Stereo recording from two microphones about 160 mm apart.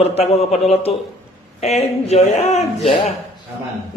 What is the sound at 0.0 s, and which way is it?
Speech, 40° left (ahead or behind).